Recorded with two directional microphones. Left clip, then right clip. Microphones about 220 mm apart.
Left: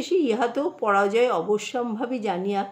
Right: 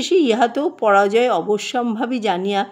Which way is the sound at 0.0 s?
40° right (ahead or behind).